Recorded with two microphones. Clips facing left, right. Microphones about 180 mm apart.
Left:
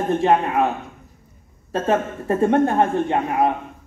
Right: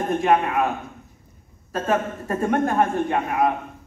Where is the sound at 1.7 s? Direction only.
25° left (ahead or behind).